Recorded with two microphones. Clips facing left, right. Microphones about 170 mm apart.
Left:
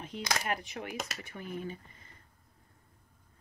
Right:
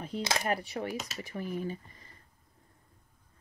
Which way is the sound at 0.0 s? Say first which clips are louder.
Right 3 dB; 30° right (ahead or behind).